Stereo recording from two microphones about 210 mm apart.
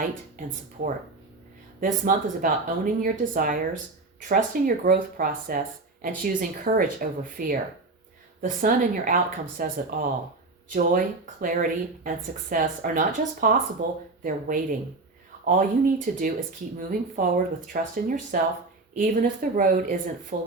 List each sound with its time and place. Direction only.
1.8 s speech: 40° right (ahead or behind)